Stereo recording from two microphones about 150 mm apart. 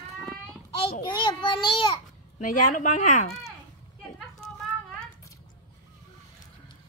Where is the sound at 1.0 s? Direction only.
30° left (ahead or behind).